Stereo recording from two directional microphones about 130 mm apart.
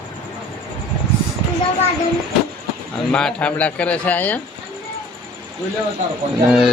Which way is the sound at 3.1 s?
5° left (ahead or behind).